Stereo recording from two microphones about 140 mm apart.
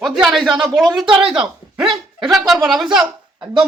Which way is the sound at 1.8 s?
35° right (ahead or behind).